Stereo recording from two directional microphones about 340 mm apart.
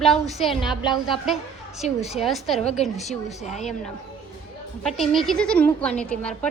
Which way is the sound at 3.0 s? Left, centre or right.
Centre.